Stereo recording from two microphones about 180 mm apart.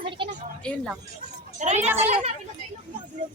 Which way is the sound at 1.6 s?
40° right (ahead or behind).